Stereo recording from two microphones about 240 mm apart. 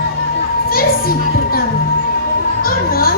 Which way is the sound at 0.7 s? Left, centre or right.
Left.